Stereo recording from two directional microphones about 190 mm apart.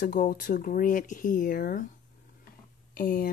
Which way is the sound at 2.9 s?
50° left (ahead or behind).